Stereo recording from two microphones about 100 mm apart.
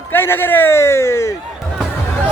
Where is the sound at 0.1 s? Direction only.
20° left (ahead or behind).